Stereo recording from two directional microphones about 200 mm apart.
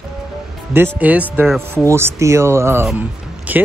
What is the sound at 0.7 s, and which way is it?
A man's voice, 10° right (ahead or behind).